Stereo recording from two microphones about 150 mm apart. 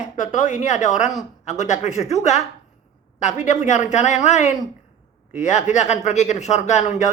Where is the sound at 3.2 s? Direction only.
50° left (ahead or behind).